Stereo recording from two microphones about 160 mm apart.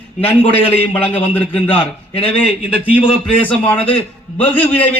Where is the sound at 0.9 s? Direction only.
10° left (ahead or behind).